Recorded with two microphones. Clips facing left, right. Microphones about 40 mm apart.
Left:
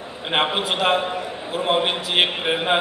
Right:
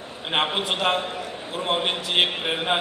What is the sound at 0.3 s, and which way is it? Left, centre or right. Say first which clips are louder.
A man's voice: left 3 dB; centre.